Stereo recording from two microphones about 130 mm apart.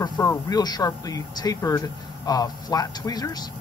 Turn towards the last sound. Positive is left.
turn(degrees=30)  # may be behind; listen again after turning